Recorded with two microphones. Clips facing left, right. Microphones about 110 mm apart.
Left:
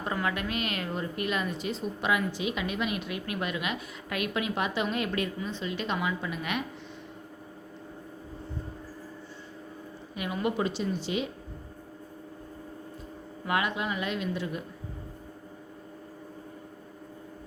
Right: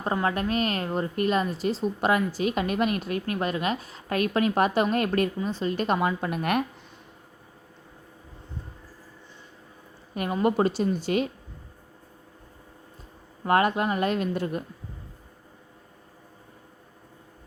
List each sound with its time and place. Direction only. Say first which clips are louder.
0.0 s a woman's voice: right 5 dB; 35° right (ahead or behind); by 6.7 s 50° right (ahead or behind)
10.2 s speech: right 6 dB; 40° right (ahead or behind)
13.4 s speech: right 7 dB; 45° right (ahead or behind)